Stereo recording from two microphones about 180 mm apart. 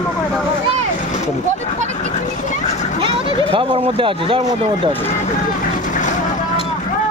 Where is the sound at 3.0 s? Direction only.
30° right (ahead or behind).